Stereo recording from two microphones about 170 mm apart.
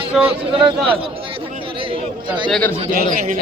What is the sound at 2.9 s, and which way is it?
Speech, 55° right (ahead or behind).